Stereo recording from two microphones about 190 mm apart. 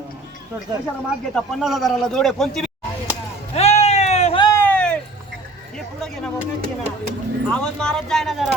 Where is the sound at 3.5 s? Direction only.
35° left (ahead or behind).